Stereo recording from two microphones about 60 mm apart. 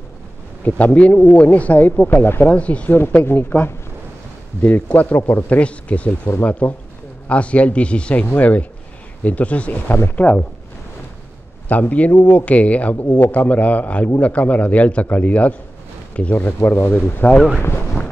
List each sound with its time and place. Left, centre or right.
0.7 s a man's voice: left
2.9 s a man's voice: left
11.7 s a man's voice: left